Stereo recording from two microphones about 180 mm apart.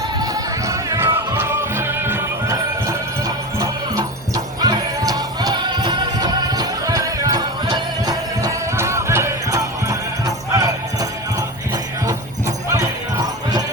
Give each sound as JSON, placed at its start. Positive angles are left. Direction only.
{"t": 0.2, "sound": "music", "side_deg": -20}